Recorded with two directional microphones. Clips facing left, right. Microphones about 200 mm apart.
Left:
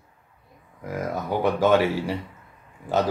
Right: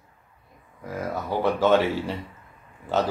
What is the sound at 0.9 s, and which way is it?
Speech, 15° left (ahead or behind).